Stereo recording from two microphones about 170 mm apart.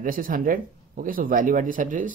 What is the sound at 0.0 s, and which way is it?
Speech, 55° right (ahead or behind).